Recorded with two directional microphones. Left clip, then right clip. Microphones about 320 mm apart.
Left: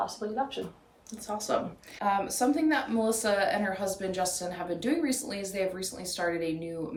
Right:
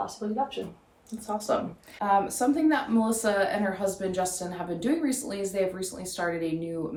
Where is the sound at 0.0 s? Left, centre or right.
Centre.